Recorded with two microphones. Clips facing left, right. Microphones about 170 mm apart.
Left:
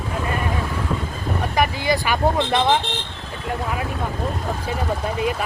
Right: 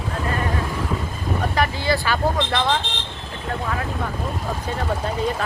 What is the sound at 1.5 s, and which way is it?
Speech, 15° left (ahead or behind).